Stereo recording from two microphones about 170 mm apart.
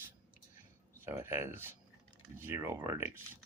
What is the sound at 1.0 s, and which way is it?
Speech, 15° right (ahead or behind).